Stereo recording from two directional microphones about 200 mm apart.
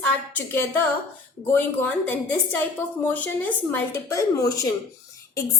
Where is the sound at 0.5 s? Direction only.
10° left (ahead or behind).